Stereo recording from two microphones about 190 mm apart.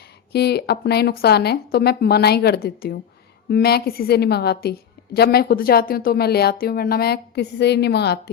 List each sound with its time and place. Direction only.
0.3 s a woman's voice: 60° left (ahead or behind)